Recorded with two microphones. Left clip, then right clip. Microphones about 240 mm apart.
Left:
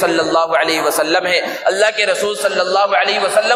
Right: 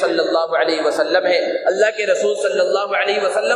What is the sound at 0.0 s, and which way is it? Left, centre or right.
A man's voice, left.